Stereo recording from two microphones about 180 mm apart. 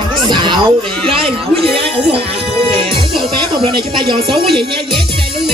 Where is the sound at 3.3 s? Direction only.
25° right (ahead or behind).